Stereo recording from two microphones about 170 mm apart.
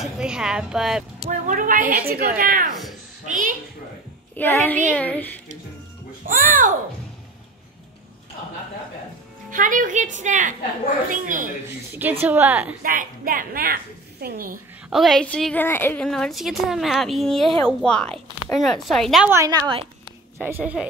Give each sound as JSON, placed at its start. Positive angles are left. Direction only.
{"t": 0.0, "sound": "a woman's voice", "side_deg": -5}
{"t": 1.3, "sound": "a woman's voice", "side_deg": -50}
{"t": 4.4, "sound": "a woman's voice", "side_deg": 10}
{"t": 6.2, "sound": "a woman's voice", "side_deg": -55}
{"t": 9.5, "sound": "a woman's voice", "side_deg": -50}
{"t": 11.9, "sound": "a woman's voice", "side_deg": -10}
{"t": 12.8, "sound": "a woman's voice", "side_deg": -55}
{"t": 14.9, "sound": "a woman's voice", "side_deg": 0}
{"t": 19.3, "sound": "a woman's voice", "side_deg": -20}
{"t": 20.4, "sound": "a woman's voice", "side_deg": -10}